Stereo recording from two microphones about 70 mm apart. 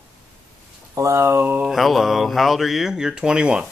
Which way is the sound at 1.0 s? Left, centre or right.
Right.